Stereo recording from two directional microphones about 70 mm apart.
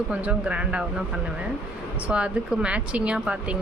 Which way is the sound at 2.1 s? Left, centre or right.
Centre.